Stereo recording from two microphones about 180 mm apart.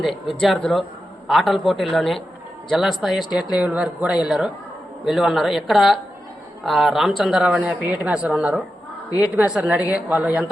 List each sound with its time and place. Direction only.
0.0 s a woman's voice: centre (ahead or behind)
9.0 s a woman's voice: 20° left (ahead or behind)
9.3 s a woman's voice: 5° right (ahead or behind)